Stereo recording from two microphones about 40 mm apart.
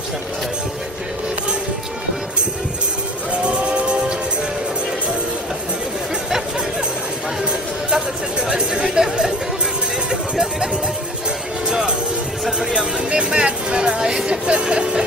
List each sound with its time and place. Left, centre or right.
3.4 s music: right
7.9 s chatter: centre
10.1 s music: centre
13.1 s music: right
14.0 s speech: centre